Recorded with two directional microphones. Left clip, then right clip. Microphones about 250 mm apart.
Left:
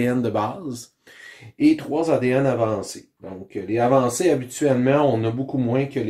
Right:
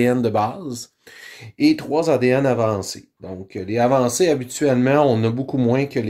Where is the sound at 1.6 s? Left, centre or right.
Right.